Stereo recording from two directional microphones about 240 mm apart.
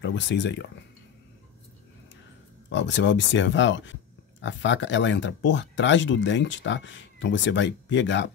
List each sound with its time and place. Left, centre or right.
0.0 s speech: left
2.7 s speech: left